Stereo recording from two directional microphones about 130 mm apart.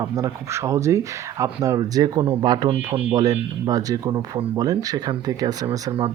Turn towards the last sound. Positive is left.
turn(degrees=-30)  # may be behind; listen again after turning